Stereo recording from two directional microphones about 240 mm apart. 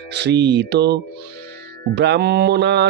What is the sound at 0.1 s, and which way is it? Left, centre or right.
Speech, right.